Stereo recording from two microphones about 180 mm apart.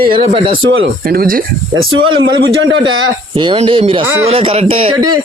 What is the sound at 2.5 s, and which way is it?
Speech, 90° right.